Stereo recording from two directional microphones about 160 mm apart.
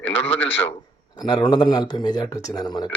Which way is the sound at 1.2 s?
25° left (ahead or behind).